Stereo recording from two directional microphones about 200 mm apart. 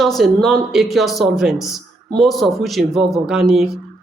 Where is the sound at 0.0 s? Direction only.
Centre (ahead or behind).